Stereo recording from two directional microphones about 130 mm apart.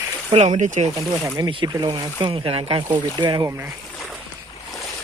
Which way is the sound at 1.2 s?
35° right (ahead or behind).